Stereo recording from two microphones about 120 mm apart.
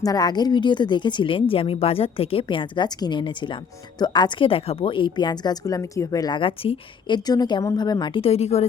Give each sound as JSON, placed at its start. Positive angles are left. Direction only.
{"t": 0.0, "sound": "speech", "side_deg": 30}
{"t": 7.3, "sound": "a woman's voice", "side_deg": 35}